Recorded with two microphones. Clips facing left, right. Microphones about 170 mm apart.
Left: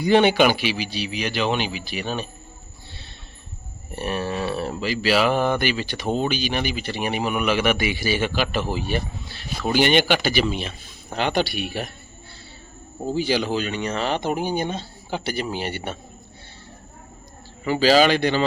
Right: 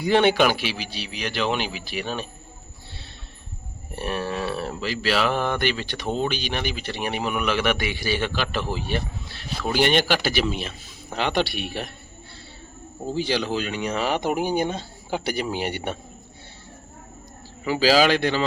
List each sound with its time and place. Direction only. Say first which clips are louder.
0.0 s speech: left 2 dB; centre (ahead or behind)
3.9 s speech: left 1 dB; centre (ahead or behind)
13.0 s speech: left 2 dB; 5° left (ahead or behind); by 16.0 s 15° right (ahead or behind)
17.7 s speech: left 2 dB; 5° right (ahead or behind)